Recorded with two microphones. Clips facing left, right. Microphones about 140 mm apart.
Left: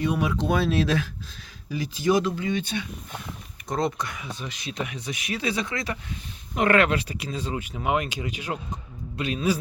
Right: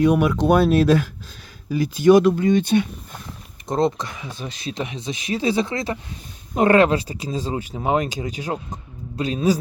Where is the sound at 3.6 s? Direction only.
25° right (ahead or behind).